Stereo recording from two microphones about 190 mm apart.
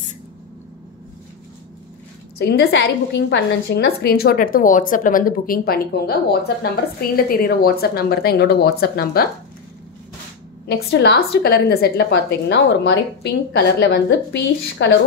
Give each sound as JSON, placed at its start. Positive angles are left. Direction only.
{"t": 2.3, "sound": "a woman's voice", "side_deg": 60}
{"t": 10.9, "sound": "a woman's voice", "side_deg": 60}